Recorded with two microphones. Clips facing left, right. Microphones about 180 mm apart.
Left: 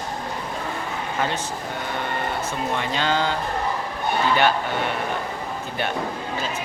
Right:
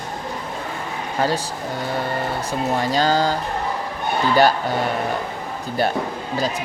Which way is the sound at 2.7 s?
40° right (ahead or behind).